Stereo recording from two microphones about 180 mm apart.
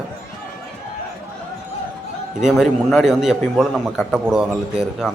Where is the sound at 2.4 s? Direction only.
Centre (ahead or behind).